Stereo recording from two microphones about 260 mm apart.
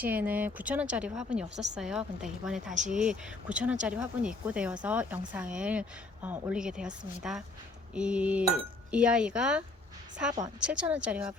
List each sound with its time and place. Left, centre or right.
0.0 s speech: centre
2.7 s speech: right
3.5 s speech: centre